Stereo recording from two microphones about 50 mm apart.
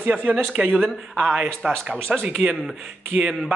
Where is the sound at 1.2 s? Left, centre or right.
Centre.